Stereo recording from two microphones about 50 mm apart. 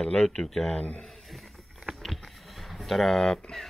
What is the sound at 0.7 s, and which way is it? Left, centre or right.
Speech, left.